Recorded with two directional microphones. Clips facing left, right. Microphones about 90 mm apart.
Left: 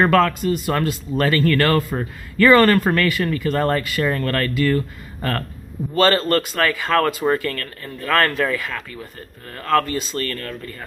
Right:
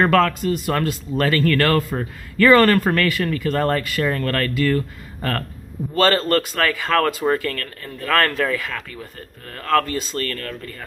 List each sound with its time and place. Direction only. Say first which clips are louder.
0.0 s speech: left 1 dB; 15° left (ahead or behind)